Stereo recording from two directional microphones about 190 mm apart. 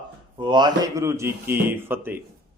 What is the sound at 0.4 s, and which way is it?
Speech, 25° right (ahead or behind).